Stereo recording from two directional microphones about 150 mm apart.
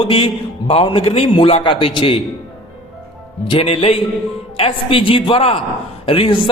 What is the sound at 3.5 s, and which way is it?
A man's voice, 40° left (ahead or behind).